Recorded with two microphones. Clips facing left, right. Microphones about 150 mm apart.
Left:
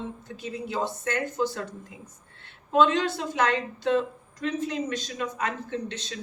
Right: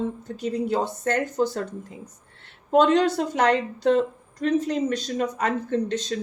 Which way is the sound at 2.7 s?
40° right (ahead or behind).